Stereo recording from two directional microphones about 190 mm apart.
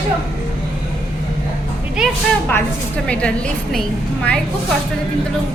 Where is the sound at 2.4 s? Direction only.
10° left (ahead or behind).